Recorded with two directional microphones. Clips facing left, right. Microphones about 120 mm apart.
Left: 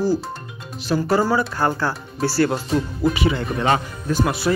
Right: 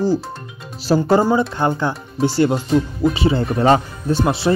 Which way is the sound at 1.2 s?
20° right (ahead or behind).